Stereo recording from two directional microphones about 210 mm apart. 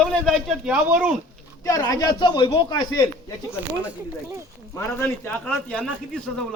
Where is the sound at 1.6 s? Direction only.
15° left (ahead or behind).